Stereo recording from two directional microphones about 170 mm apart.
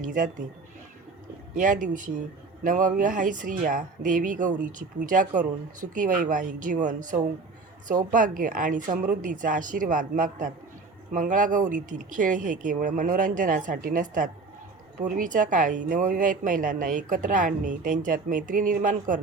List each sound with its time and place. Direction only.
0.0 s a woman's voice: 50° right (ahead or behind)
1.5 s a woman's voice: 50° right (ahead or behind)